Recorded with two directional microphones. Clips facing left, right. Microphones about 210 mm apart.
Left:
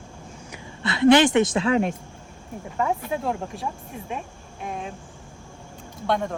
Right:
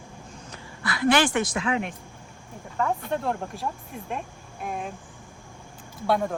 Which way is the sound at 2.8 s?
5° left (ahead or behind).